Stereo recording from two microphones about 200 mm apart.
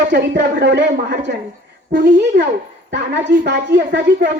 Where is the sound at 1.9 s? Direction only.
40° right (ahead or behind).